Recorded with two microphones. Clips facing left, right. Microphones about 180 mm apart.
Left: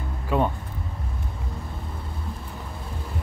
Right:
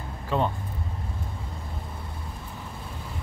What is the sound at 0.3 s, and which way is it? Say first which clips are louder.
Speech: left 3 dB; 10° left (ahead or behind).